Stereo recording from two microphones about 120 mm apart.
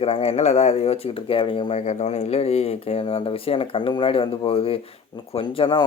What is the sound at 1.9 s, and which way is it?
Speech, 70° left (ahead or behind).